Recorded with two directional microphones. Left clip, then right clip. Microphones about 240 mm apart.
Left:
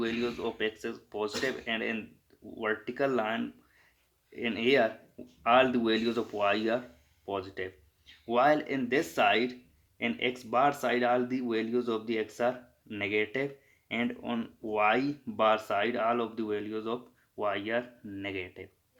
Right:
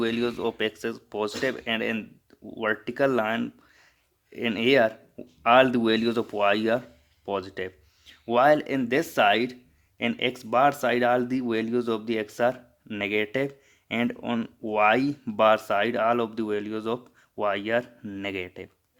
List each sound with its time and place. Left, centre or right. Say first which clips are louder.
0.0 s speech: right 6 dB; right